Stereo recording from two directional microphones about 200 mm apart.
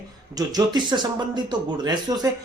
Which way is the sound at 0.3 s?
20° right (ahead or behind).